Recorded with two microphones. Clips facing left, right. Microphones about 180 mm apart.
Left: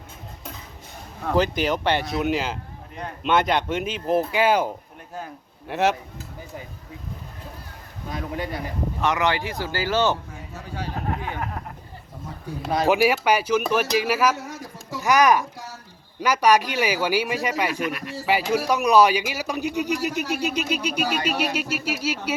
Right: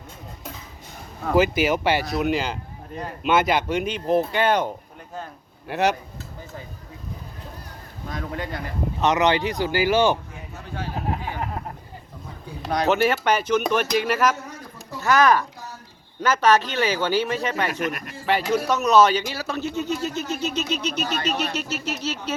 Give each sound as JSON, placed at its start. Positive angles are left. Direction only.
{"t": 1.2, "sound": "a man's voice", "side_deg": -5}
{"t": 8.1, "sound": "speech", "side_deg": 10}
{"t": 9.0, "sound": "speech", "side_deg": -20}
{"t": 12.6, "sound": "speech", "side_deg": 0}
{"t": 14.4, "sound": "a sound", "side_deg": 90}
{"t": 15.0, "sound": "speech", "side_deg": 15}
{"t": 17.7, "sound": "speech", "side_deg": -45}
{"t": 18.3, "sound": "speech", "side_deg": 5}